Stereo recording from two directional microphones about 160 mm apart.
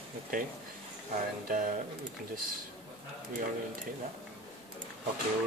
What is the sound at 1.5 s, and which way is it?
Speech, 60° right (ahead or behind).